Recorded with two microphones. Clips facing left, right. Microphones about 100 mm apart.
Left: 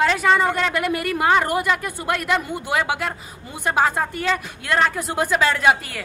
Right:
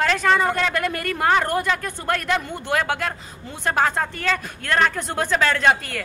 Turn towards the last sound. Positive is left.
turn(degrees=10)  # may be behind; listen again after turning